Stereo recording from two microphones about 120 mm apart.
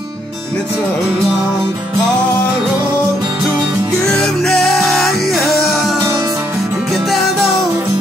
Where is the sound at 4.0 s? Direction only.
5° left (ahead or behind).